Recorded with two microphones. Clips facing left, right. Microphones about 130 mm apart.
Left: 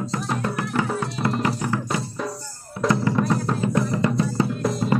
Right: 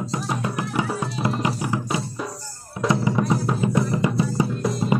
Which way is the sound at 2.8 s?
Centre (ahead or behind).